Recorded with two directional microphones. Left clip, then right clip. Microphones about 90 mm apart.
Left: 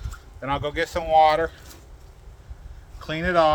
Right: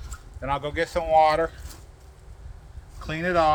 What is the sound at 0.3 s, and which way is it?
Speech, 45° left (ahead or behind).